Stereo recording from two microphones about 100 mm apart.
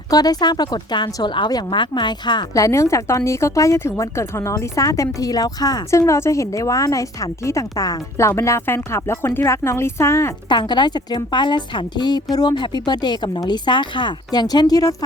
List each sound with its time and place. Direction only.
0.1 s a woman's voice: 40° left (ahead or behind)
2.5 s speech: 35° left (ahead or behind)
6.0 s a woman's voice: 25° left (ahead or behind)
10.5 s a woman's voice: 50° left (ahead or behind)